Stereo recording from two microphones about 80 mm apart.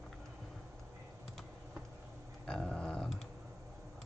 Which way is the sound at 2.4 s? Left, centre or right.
Centre.